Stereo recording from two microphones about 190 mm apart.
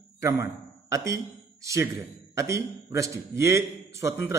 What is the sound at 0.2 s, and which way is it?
A man's voice, 15° right (ahead or behind).